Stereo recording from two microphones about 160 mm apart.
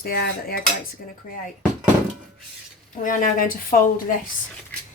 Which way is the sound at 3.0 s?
60° left (ahead or behind).